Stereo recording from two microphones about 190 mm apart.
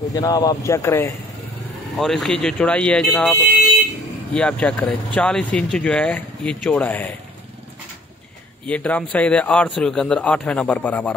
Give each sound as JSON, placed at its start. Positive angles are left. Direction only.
{"t": 0.1, "sound": "speech", "side_deg": 20}
{"t": 2.0, "sound": "speech", "side_deg": 0}
{"t": 8.6, "sound": "speech", "side_deg": 5}